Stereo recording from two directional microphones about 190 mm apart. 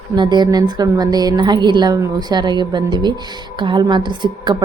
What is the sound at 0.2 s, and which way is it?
A woman's voice, 25° right (ahead or behind).